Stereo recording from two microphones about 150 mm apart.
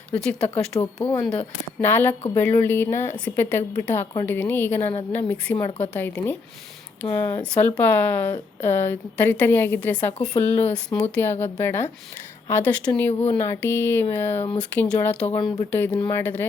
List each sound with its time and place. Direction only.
0.1 s speech: 5° left (ahead or behind)
15.4 s speech: 30° left (ahead or behind)
15.7 s speech: 15° left (ahead or behind)